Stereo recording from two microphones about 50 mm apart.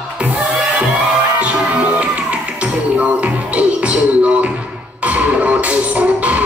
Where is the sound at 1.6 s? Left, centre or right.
Right.